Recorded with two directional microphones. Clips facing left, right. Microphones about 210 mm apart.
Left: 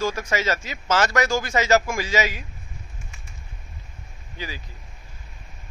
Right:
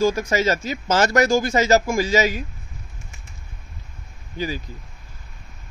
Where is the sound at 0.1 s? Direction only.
40° right (ahead or behind).